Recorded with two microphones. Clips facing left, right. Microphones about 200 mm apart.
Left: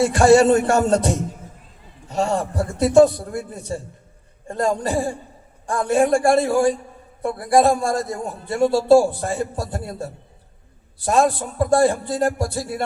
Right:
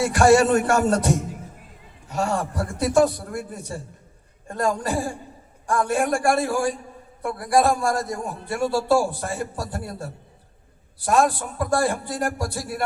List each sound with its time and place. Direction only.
0.0 s a man's voice: 25° left (ahead or behind)